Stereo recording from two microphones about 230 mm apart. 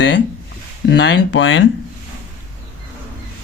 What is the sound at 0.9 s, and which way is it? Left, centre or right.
Speech, left.